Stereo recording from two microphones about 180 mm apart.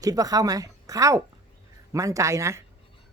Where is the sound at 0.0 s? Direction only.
20° right (ahead or behind).